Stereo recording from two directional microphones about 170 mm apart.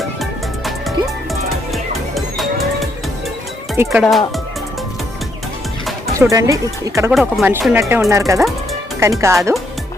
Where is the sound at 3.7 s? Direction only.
15° right (ahead or behind).